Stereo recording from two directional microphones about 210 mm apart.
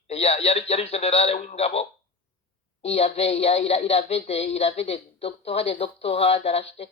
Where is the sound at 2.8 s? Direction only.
30° left (ahead or behind).